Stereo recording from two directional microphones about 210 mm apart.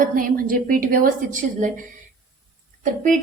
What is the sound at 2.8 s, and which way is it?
Speech, 40° right (ahead or behind).